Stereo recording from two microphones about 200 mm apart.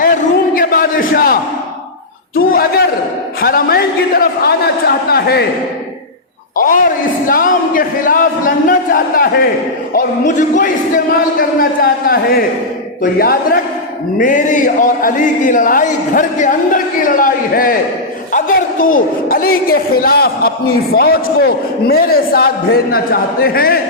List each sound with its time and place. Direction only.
0.0 s a sound: 45° left (ahead or behind)
2.3 s speech: 50° left (ahead or behind)
7.3 s speech: 45° left (ahead or behind)